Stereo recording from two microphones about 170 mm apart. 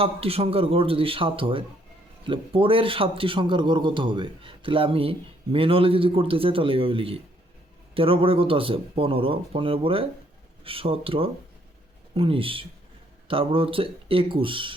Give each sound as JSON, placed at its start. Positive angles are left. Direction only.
{"t": 0.0, "sound": "a man's voice", "side_deg": -35}